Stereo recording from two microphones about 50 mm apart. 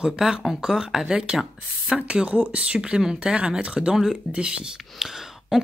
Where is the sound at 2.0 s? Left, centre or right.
Right.